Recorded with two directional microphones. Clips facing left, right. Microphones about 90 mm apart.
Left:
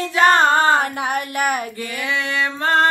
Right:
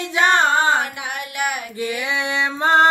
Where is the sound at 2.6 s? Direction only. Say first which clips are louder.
Right 2 dB; 20° right (ahead or behind).